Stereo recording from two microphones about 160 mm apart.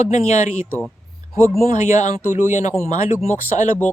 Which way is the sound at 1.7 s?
50° left (ahead or behind).